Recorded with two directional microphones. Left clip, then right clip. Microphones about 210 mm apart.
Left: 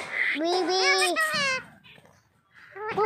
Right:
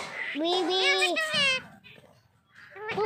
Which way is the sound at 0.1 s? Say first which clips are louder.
Left 12 dB; 50° left (ahead or behind).